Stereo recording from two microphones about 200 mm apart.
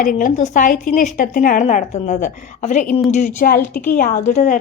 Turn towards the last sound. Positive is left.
turn(degrees=35)  # may be behind; listen again after turning